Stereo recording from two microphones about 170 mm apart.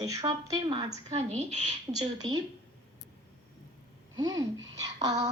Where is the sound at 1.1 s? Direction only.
40° right (ahead or behind).